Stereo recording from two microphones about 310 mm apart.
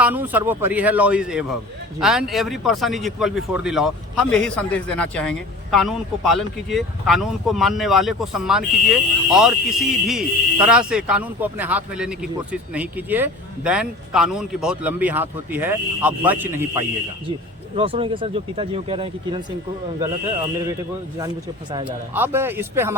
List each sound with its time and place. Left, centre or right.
0.0 s a man's voice: centre
21.7 s speech: centre